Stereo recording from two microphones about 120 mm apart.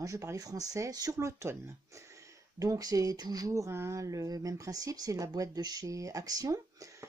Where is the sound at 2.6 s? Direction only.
30° right (ahead or behind).